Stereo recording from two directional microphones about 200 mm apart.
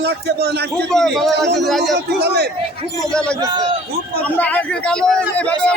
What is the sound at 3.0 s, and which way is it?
Speech, 5° left (ahead or behind).